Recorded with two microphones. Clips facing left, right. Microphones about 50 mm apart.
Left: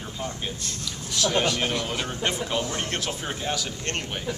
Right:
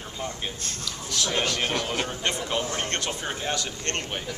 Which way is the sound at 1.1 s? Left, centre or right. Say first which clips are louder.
Left 3 dB; centre.